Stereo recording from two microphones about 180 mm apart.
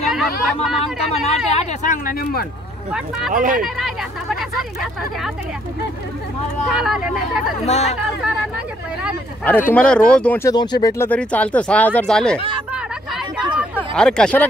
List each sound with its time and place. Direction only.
0.0 s chatter: centre (ahead or behind)
1.2 s speech: 35° left (ahead or behind); by 2.4 s 55° left (ahead or behind)
2.9 s speech: 5° right (ahead or behind)
3.3 s speech: 50° right (ahead or behind)
3.6 s speech: centre (ahead or behind)
6.7 s speech: 5° right (ahead or behind)
7.6 s speech: 35° left (ahead or behind)
9.4 s speech: 10° left (ahead or behind)
10.5 s speech: 25° left (ahead or behind); by 12.4 s 5° left (ahead or behind)
13.9 s speech: 5° left (ahead or behind)